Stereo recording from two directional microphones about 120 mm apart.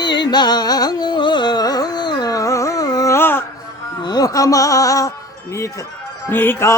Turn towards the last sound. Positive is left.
turn(degrees=20)  # may be behind; listen again after turning